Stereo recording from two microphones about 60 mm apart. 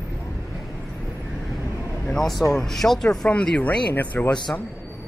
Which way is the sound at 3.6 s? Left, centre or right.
Left.